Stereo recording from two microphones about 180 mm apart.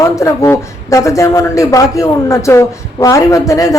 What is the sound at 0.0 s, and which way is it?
Speech, 15° left (ahead or behind).